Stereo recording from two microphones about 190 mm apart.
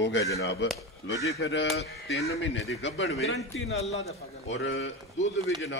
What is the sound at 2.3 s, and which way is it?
Speech, 80° left.